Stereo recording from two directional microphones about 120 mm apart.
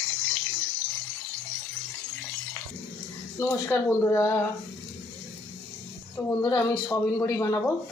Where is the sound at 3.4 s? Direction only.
20° left (ahead or behind).